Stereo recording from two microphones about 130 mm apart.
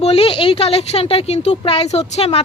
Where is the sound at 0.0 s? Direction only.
50° left (ahead or behind).